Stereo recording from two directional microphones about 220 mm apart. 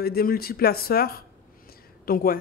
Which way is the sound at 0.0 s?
45° left (ahead or behind).